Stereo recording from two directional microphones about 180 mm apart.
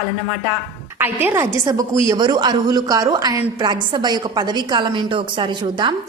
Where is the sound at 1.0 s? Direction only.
10° right (ahead or behind).